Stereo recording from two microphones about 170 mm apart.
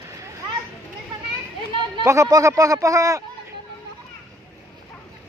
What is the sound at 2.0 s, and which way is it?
Speech, 20° right (ahead or behind).